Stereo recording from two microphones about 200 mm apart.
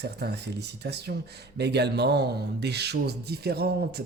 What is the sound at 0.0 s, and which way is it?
Speech, 55° right (ahead or behind).